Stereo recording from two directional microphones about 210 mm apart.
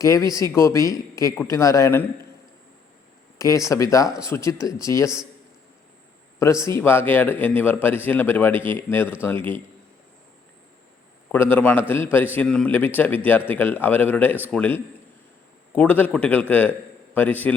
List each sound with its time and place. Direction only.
0.0 s speech: 15° left (ahead or behind)
3.3 s speech: 15° left (ahead or behind)
6.4 s speech: 15° left (ahead or behind)
11.3 s speech: 10° left (ahead or behind)